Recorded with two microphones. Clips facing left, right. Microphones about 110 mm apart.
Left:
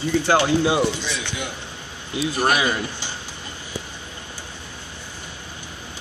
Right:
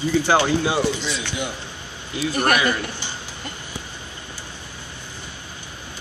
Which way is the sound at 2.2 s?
25° left (ahead or behind).